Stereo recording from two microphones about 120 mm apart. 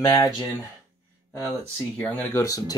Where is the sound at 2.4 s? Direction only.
20° left (ahead or behind).